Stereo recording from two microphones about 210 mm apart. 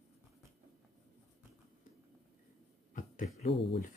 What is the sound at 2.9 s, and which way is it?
Speech, 35° left (ahead or behind).